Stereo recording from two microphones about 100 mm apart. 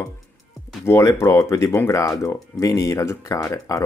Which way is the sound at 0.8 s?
30° left (ahead or behind).